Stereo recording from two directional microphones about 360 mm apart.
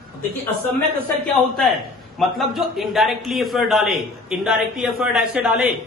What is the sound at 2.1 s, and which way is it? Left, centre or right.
A man's voice, centre.